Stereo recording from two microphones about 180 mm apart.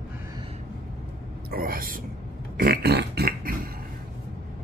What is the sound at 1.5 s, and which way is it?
Speech, 55° right (ahead or behind).